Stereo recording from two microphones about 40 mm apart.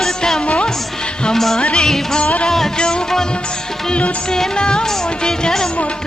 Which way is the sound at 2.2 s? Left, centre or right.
Left.